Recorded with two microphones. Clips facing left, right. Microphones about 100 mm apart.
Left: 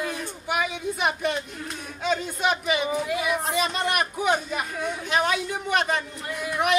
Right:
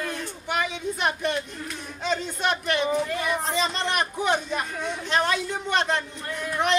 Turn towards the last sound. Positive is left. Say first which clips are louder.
# even
turn(degrees=10)  # may be behind; listen again after turning